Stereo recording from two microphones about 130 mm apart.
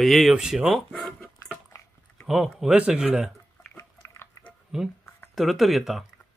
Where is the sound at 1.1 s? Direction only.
10° left (ahead or behind).